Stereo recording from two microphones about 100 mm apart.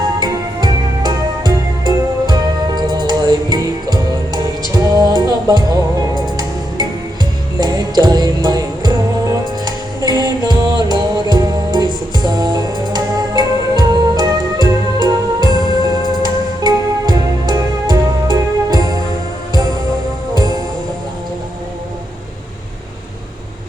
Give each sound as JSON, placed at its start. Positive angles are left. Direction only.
{"t": 0.2, "sound": "music", "side_deg": -45}